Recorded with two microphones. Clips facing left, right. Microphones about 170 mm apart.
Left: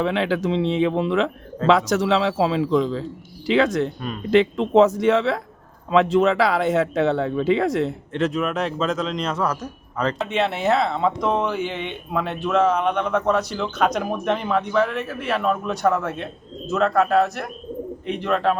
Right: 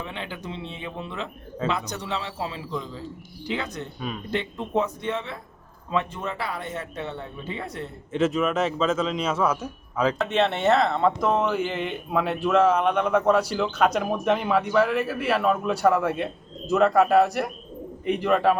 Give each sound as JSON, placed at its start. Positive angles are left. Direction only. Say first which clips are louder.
{"t": 0.0, "sound": "speech", "louder": "left 13 dB", "side_deg": 90}
{"t": 8.1, "sound": "speech", "louder": "right 3 dB", "side_deg": 0}